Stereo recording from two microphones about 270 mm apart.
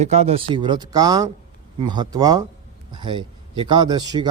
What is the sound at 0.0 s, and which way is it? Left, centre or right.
A man's voice, right.